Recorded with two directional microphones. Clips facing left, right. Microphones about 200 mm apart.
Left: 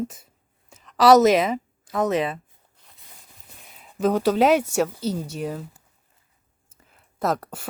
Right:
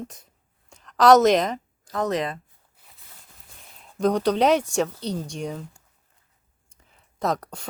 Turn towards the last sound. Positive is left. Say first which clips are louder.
# left 1 dB
turn(degrees=5)  # may be behind; listen again after turning